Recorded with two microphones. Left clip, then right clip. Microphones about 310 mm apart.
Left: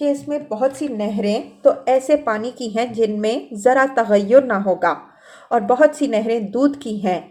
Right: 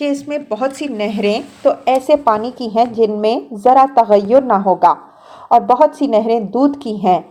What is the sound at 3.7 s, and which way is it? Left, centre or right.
Speech, right.